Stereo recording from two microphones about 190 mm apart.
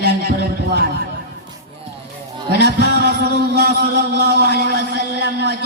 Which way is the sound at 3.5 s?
55° right (ahead or behind).